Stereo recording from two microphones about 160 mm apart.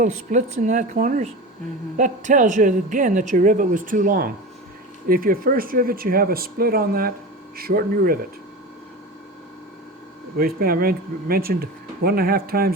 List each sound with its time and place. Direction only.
0.0 s speech: 50° right (ahead or behind)
10.3 s speech: 65° right (ahead or behind)